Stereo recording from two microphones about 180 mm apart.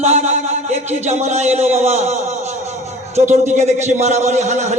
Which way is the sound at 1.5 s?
35° right (ahead or behind).